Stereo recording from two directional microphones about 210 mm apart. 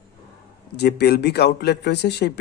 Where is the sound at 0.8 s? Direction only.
50° left (ahead or behind).